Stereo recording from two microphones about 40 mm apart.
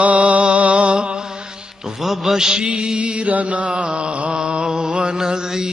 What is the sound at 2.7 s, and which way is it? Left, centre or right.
Mantra, right.